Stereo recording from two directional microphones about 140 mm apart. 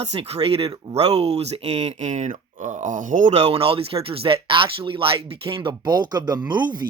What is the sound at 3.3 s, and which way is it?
Speech, 45° right (ahead or behind).